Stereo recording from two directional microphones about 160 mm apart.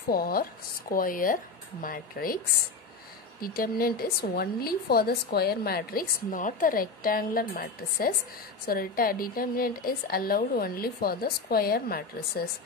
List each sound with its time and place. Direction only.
0.1 s speech: 70° left (ahead or behind)